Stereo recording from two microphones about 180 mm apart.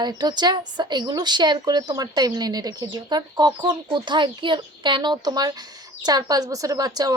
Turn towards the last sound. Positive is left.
turn(degrees=-20)  # may be behind; listen again after turning